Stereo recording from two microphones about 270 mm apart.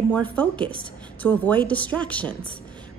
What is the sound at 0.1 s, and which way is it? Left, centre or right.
Speech, centre.